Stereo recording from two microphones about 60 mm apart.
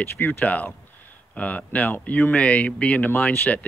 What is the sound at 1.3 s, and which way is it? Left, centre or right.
Speech, left.